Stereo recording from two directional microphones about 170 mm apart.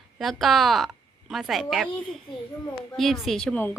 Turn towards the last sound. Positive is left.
turn(degrees=5)  # may be behind; listen again after turning